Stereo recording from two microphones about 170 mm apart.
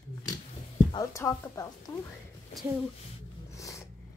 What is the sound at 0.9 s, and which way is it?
Speech, 15° left (ahead or behind).